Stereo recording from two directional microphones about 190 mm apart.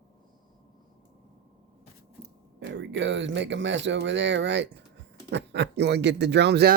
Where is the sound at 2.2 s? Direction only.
65° right (ahead or behind).